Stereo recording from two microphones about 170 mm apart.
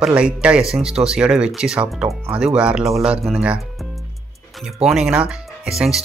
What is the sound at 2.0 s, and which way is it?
Speech, 15° right (ahead or behind).